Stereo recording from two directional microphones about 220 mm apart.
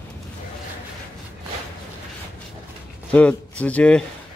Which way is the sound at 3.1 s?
5° left (ahead or behind).